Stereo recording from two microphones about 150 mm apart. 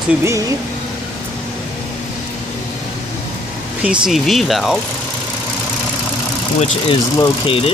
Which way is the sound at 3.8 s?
5° right (ahead or behind).